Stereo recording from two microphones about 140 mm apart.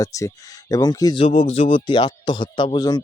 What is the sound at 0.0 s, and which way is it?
Speech, 25° left (ahead or behind).